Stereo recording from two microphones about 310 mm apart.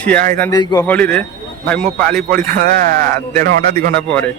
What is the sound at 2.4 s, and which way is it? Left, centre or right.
Speech, right.